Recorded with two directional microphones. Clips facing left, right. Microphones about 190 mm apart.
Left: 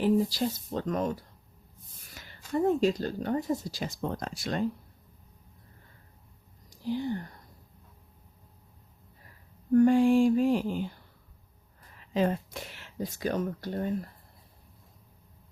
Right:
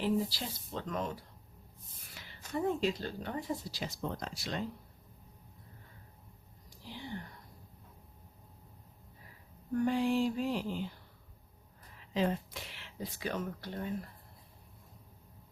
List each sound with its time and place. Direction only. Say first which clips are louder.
0.0 s speech: left 7 dB; 45° left (ahead or behind)
6.7 s speech: left 13 dB; 45° left (ahead or behind)
9.7 s speech: left 9 dB; 50° left (ahead or behind)
12.1 s speech: left 5 dB; 50° left (ahead or behind)